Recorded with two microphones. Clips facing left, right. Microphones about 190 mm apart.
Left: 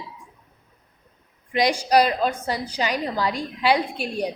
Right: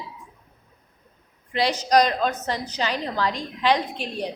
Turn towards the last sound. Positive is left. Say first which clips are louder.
# left 3 dB
turn(degrees=10)  # may be behind; listen again after turning